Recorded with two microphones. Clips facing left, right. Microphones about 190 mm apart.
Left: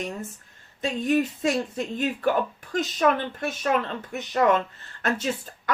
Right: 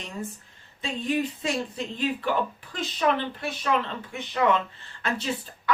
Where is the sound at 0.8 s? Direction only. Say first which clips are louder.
Left 4 dB; 45° left (ahead or behind).